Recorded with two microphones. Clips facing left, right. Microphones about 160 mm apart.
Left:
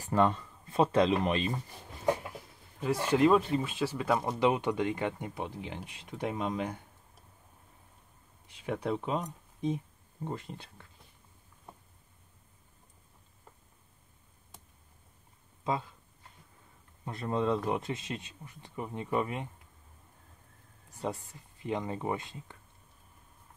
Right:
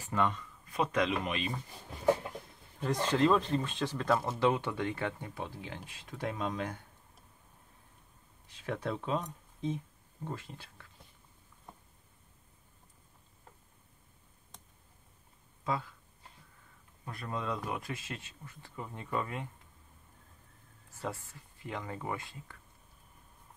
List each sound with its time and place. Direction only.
0.0 s speech: 35° left (ahead or behind)
2.3 s speech: 5° left (ahead or behind)
8.6 s speech: 15° left (ahead or behind)
14.5 s tick: 5° left (ahead or behind)
15.6 s speech: 20° left (ahead or behind)
17.0 s speech: 25° left (ahead or behind)
20.9 s speech: 20° left (ahead or behind)